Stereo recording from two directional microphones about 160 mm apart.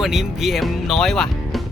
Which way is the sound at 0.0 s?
Centre (ahead or behind).